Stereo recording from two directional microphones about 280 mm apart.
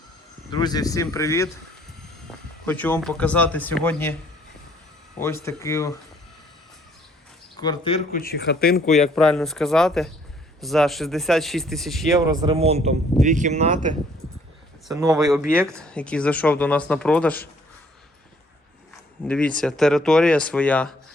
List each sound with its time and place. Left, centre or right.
0.5 s speech: centre
2.6 s speech: centre
5.2 s speech: centre
7.6 s a man's voice: centre; by 9.0 s left
9.0 s speech: centre
12.3 s speech: centre
14.8 s speech: centre
15.8 s speech: centre
19.2 s speech: centre